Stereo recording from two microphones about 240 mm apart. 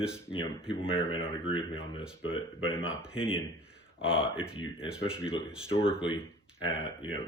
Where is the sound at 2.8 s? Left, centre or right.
Centre.